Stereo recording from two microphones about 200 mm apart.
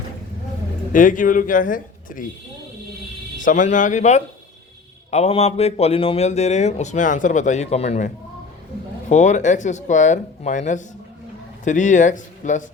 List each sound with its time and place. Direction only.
0.9 s a man's voice: 40° left (ahead or behind)
3.3 s a man's voice: 40° left (ahead or behind)